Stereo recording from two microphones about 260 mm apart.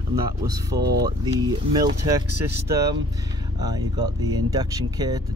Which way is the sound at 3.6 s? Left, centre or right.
Centre.